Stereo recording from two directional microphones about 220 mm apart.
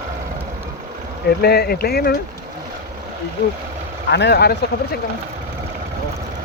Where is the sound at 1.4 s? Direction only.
45° left (ahead or behind).